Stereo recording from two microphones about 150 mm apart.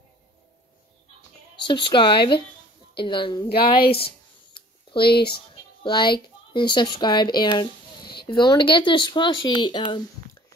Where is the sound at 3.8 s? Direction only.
90° left.